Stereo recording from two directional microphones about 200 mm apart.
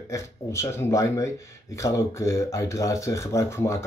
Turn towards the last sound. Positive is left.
turn(degrees=15)  # may be behind; listen again after turning